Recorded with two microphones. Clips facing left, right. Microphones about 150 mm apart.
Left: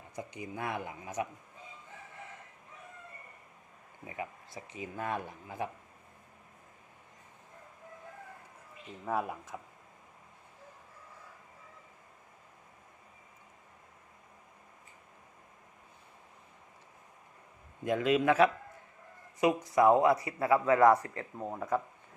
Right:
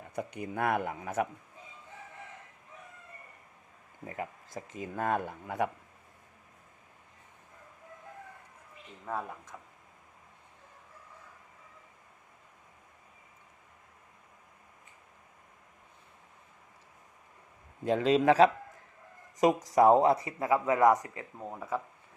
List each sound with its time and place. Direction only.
0.2 s speech: 60° right (ahead or behind)
4.0 s speech: 45° right (ahead or behind)
9.0 s speech: 10° left (ahead or behind)
17.8 s a man's voice: 30° right (ahead or behind)
19.7 s speech: 35° right (ahead or behind); by 21.2 s 15° right (ahead or behind)
21.3 s speech: 10° left (ahead or behind)